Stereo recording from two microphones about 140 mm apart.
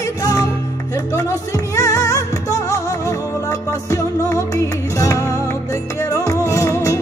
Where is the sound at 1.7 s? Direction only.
25° left (ahead or behind).